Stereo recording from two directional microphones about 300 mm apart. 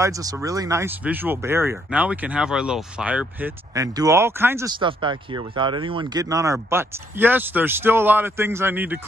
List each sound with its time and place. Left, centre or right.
0.0 s speech: centre